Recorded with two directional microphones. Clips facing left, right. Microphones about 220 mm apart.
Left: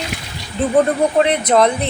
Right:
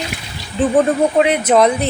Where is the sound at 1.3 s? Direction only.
5° right (ahead or behind).